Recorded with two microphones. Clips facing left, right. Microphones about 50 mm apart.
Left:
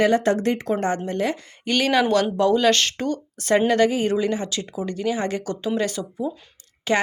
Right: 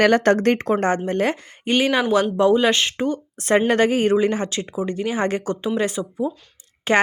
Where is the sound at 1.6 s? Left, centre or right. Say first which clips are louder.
Right 1 dB; centre.